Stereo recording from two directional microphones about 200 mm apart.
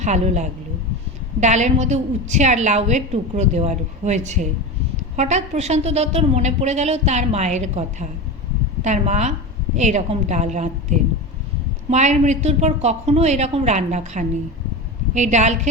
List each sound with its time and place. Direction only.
0.0 s a woman's voice: 35° right (ahead or behind)